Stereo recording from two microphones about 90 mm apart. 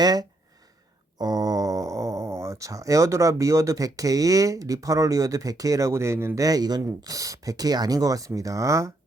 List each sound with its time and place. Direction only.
0.0 s speech: 45° right (ahead or behind); by 6.4 s 30° right (ahead or behind)
6.4 s speech: 45° right (ahead or behind)